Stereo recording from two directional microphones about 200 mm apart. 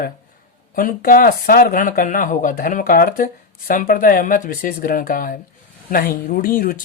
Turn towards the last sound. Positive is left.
turn(degrees=45)  # may be behind; listen again after turning